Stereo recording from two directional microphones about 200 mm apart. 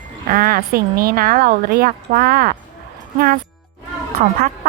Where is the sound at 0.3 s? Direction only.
45° right (ahead or behind).